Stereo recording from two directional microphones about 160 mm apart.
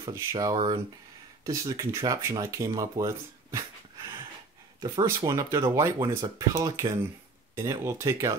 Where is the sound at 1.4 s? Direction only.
20° right (ahead or behind).